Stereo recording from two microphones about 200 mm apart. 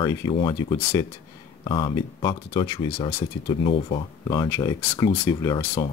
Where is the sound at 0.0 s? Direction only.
15° left (ahead or behind).